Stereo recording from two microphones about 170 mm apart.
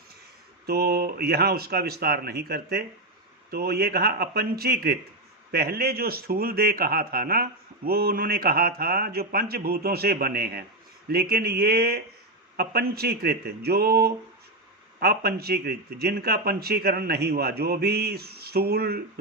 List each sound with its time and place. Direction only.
0.7 s a man's voice: 65° right (ahead or behind)